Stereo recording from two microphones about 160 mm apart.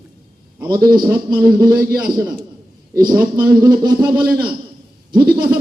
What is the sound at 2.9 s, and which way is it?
A man's voice, 20° right (ahead or behind).